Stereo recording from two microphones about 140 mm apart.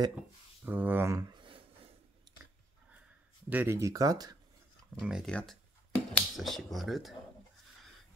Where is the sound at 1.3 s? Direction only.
35° right (ahead or behind).